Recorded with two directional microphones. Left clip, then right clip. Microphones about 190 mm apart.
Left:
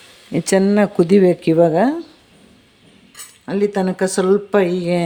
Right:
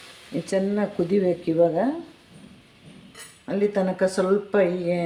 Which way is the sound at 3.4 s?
50° left (ahead or behind).